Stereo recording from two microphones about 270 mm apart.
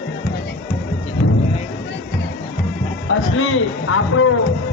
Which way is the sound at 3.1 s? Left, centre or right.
Left.